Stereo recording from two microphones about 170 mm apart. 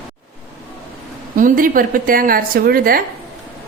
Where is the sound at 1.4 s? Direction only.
50° right (ahead or behind).